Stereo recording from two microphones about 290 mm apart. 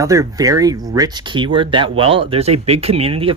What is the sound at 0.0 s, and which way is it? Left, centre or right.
Speech, centre.